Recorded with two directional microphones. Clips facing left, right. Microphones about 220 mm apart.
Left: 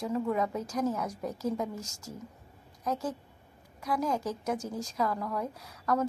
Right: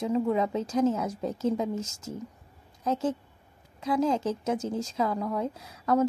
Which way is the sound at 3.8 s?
25° right (ahead or behind).